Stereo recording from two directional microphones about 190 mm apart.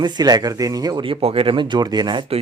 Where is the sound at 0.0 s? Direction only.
20° right (ahead or behind).